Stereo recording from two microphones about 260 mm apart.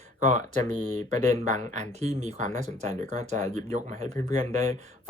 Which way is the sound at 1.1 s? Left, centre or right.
Right.